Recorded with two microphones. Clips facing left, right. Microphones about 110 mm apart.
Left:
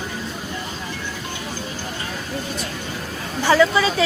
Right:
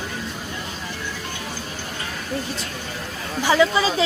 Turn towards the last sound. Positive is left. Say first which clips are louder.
# left 1 dB
turn(degrees=-25)  # may be behind; listen again after turning